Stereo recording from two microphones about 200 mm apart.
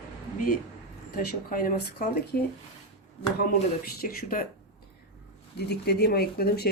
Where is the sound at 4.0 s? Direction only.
45° left (ahead or behind).